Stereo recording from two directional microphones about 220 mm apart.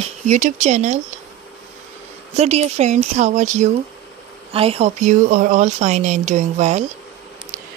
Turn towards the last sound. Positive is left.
turn(degrees=-30)  # may be behind; listen again after turning